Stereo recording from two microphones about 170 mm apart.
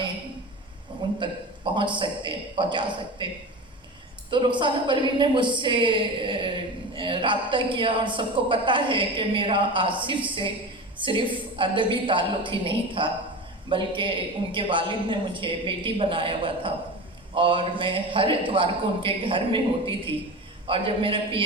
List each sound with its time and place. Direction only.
1.2 s a man's voice: 25° right (ahead or behind)
4.3 s a man's voice: 30° right (ahead or behind)